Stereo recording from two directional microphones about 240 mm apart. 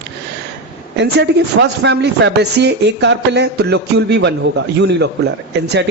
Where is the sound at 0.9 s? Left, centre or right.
Right.